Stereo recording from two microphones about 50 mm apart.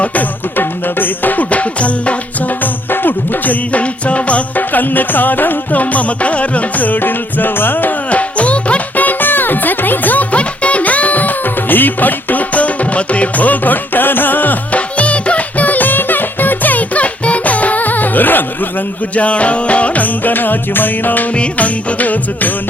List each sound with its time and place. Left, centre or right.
0.0 s music: left
2.9 s music: left
19.1 s music: left
21.3 s music: left